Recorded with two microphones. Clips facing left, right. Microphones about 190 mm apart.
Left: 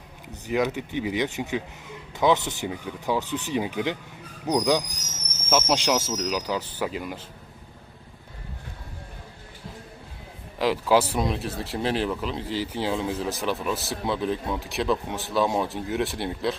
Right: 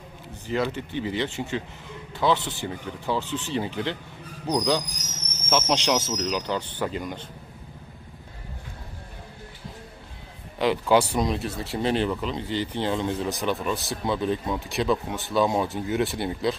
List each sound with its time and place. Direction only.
0.4 s a man's voice: 15° left (ahead or behind)
10.6 s speech: centre (ahead or behind)